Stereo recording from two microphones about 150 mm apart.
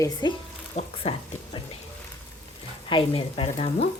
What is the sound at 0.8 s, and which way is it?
Speech, 50° left (ahead or behind).